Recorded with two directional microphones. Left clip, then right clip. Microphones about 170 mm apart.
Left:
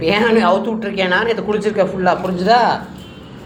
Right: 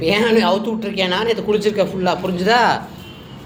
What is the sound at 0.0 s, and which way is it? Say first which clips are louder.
A man's voice: left 2 dB; 15° right (ahead or behind).